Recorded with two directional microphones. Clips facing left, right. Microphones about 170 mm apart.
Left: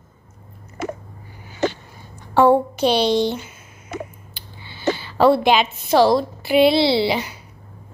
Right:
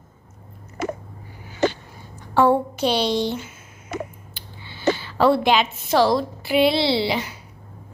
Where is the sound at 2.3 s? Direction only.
20° left (ahead or behind).